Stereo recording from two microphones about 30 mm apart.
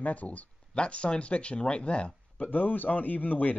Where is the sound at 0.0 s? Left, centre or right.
Left.